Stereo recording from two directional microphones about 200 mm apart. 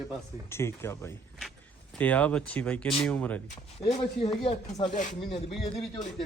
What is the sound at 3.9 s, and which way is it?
Speech, 35° left (ahead or behind).